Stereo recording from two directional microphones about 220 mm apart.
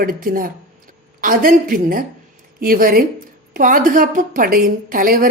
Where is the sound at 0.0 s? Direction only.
40° right (ahead or behind).